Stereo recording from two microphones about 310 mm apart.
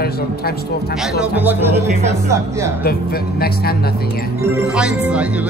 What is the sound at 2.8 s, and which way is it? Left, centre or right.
Speech, left.